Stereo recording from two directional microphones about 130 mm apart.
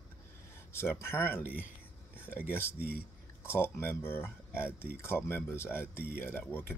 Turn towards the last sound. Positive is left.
turn(degrees=15)  # may be behind; listen again after turning